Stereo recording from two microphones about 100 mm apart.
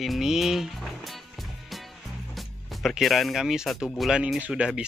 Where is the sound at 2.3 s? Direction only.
Centre (ahead or behind).